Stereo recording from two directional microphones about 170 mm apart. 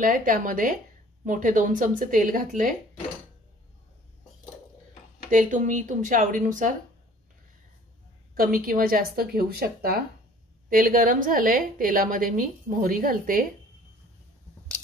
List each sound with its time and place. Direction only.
0.0 s a woman's voice: 55° right (ahead or behind)
5.3 s speech: 50° right (ahead or behind)
8.4 s a woman's voice: 60° right (ahead or behind)